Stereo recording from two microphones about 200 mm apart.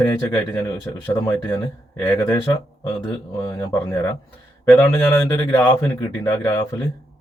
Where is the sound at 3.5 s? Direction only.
15° left (ahead or behind).